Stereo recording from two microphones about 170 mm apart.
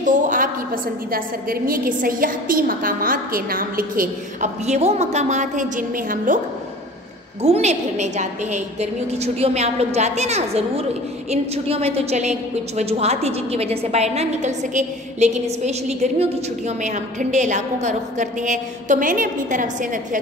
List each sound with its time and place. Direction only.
0.0 s a woman's voice: 50° right (ahead or behind)
7.4 s a woman's voice: 35° right (ahead or behind)
8.7 s a woman's voice: 40° right (ahead or behind)